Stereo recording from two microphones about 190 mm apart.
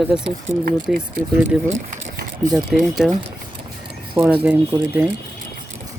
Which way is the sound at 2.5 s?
Centre (ahead or behind).